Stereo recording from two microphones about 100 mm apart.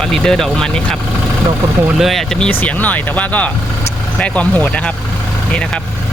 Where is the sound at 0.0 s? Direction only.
5° left (ahead or behind).